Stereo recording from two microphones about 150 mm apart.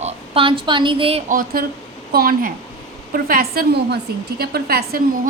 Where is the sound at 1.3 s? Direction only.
75° right (ahead or behind).